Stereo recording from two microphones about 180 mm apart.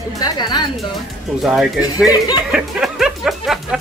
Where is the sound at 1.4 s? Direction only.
Centre (ahead or behind).